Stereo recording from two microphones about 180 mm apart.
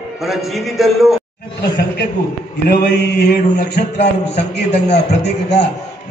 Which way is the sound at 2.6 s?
65° left (ahead or behind).